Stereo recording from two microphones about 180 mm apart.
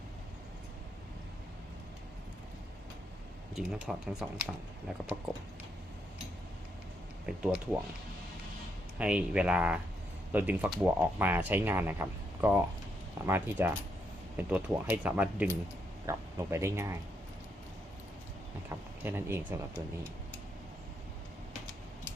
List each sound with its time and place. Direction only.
3.8 s speech: 5° right (ahead or behind)
7.3 s speech: 5° right (ahead or behind)
9.0 s speech: 5° right (ahead or behind)
18.7 s speech: 10° right (ahead or behind)